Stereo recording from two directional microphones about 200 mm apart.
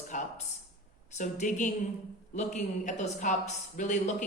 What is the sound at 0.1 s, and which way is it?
A man's voice, 40° left (ahead or behind).